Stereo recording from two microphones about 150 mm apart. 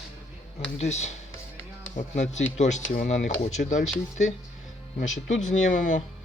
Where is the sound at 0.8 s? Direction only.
50° left (ahead or behind).